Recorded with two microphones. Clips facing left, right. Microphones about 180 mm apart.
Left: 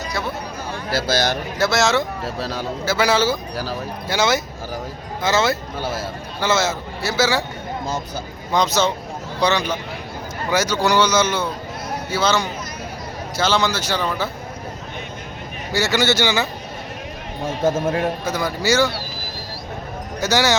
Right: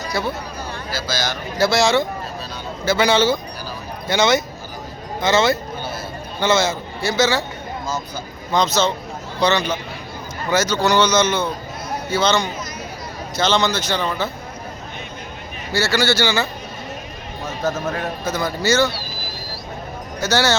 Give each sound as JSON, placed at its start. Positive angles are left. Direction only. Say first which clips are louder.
{"t": 0.9, "sound": "speech", "louder": "left 6 dB", "side_deg": 65}
{"t": 1.5, "sound": "a man's voice", "louder": "right 3 dB", "side_deg": 0}
{"t": 2.2, "sound": "speech", "louder": "left 5 dB", "side_deg": 90}
{"t": 2.8, "sound": "a man's voice", "louder": "right 2 dB", "side_deg": 5}
{"t": 5.7, "sound": "a man's voice", "louder": "left 3 dB", "side_deg": 90}
{"t": 6.4, "sound": "a man's voice", "louder": "right 2 dB", "side_deg": 5}
{"t": 8.5, "sound": "speech", "louder": "even", "side_deg": 15}
{"t": 15.7, "sound": "speech", "louder": "even", "side_deg": 15}
{"t": 17.4, "sound": "speech", "louder": "left 4 dB", "side_deg": 25}
{"t": 18.3, "sound": "speech", "louder": "right 5 dB", "side_deg": 10}
{"t": 20.2, "sound": "speech", "louder": "even", "side_deg": 15}